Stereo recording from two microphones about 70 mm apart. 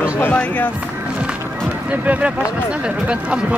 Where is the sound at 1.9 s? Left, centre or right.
Right.